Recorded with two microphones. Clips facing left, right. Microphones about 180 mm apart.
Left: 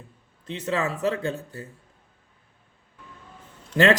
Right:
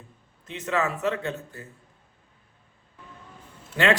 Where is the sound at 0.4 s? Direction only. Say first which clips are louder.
Even; 30° left (ahead or behind).